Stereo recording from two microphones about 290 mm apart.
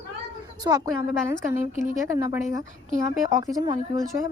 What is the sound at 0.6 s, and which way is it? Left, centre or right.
Speech, centre.